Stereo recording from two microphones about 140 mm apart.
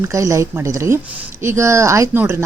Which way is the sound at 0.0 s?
20° right (ahead or behind).